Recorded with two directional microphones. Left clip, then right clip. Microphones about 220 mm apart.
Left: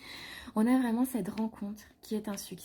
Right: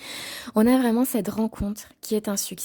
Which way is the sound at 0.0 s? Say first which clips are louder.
Right 10 dB; 55° right (ahead or behind).